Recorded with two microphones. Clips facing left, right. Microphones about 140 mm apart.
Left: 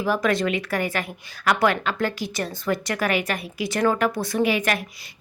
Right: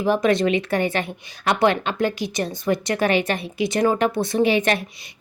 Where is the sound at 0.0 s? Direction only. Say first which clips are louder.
Right 4 dB; 20° right (ahead or behind).